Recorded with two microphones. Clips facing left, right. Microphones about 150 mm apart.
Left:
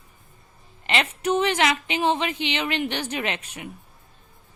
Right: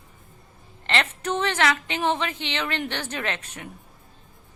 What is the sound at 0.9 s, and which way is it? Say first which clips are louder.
A woman's voice: left 2 dB; 15° left (ahead or behind).